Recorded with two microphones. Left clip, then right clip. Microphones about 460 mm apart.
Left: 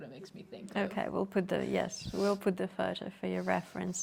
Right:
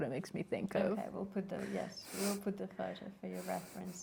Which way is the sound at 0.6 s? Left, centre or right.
Left.